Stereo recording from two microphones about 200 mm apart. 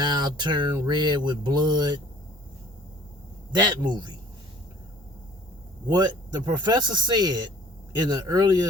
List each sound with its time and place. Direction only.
0.0 s speech: 20° right (ahead or behind)
3.5 s speech: 20° right (ahead or behind)
5.9 s speech: 20° right (ahead or behind)